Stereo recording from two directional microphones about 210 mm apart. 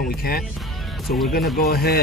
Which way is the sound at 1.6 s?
50° left (ahead or behind).